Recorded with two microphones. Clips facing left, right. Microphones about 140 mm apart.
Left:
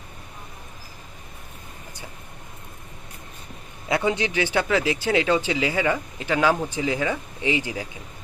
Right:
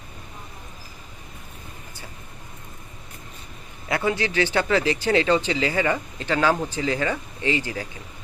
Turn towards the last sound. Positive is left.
turn(degrees=15)  # may be behind; listen again after turning